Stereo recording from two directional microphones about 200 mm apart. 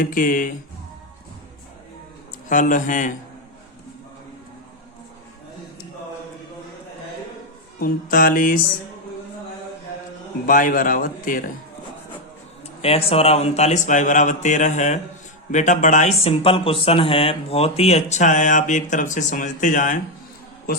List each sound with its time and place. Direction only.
0.0 s a man's voice: 45° left (ahead or behind)
2.5 s speech: 40° left (ahead or behind)
7.8 s a man's voice: 45° left (ahead or behind)
10.4 s a man's voice: 45° left (ahead or behind)
12.8 s speech: 30° left (ahead or behind)